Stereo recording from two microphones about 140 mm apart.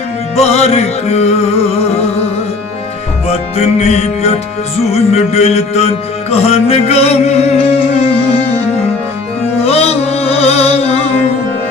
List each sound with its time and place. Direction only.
0.3 s music: 50° left (ahead or behind)
3.2 s music: 50° left (ahead or behind)
9.6 s music: 45° left (ahead or behind)